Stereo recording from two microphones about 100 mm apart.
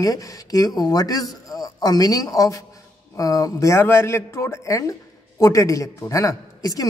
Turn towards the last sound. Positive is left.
turn(degrees=35)  # may be behind; listen again after turning